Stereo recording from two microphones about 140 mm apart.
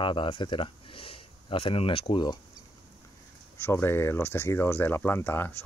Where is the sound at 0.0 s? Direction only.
35° left (ahead or behind).